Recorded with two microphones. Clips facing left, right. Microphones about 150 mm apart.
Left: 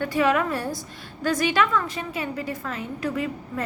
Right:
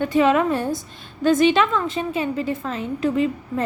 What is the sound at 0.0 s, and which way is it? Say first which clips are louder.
A woman's voice: right 4 dB; 25° right (ahead or behind).